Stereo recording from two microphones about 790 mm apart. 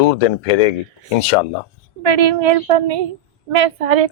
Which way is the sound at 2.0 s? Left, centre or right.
Right.